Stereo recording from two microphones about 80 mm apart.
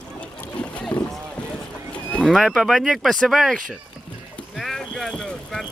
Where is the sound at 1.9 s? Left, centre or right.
Centre.